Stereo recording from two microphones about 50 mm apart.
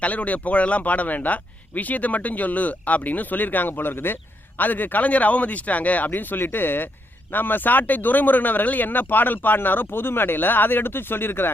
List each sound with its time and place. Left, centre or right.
0.0 s speech: left
6.1 s speech: left